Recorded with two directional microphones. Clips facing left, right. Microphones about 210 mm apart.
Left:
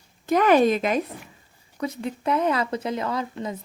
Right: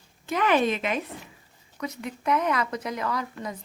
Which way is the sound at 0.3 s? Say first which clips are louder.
Left 6 dB; 40° left (ahead or behind).